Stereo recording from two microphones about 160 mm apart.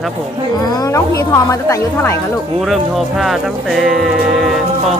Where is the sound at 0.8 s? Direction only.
20° left (ahead or behind).